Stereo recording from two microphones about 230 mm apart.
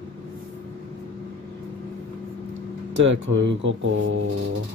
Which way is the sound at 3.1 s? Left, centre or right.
Right.